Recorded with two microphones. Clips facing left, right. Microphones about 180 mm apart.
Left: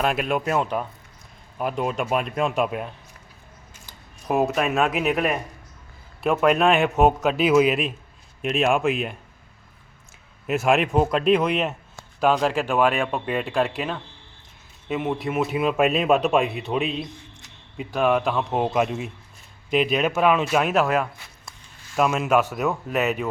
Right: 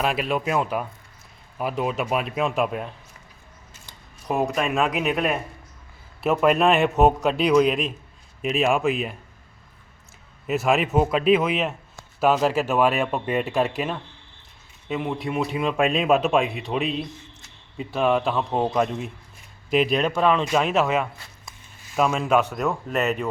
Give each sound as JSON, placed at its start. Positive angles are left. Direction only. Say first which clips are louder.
{"t": 0.0, "sound": "a man's voice", "louder": "left 1 dB", "side_deg": 0}
{"t": 10.4, "sound": "a man's voice", "louder": "left 1 dB", "side_deg": 0}